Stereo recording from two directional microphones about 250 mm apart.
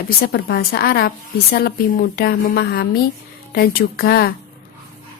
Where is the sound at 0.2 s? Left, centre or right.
Left.